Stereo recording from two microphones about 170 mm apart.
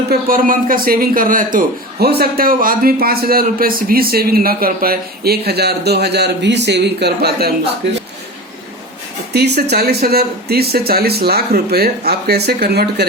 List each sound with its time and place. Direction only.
0.1 s a man's voice: 55° right (ahead or behind)
7.8 s speech: 90° right
9.3 s speech: 75° right (ahead or behind)